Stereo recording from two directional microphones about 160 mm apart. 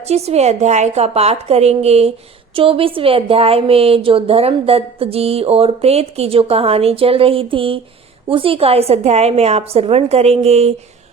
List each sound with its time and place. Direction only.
0.1 s a woman's voice: 40° right (ahead or behind)